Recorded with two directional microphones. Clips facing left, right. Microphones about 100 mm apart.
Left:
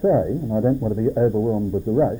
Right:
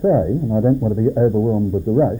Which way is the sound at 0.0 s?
5° right (ahead or behind).